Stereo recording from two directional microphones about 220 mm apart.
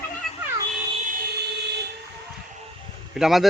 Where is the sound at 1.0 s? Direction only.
40° right (ahead or behind).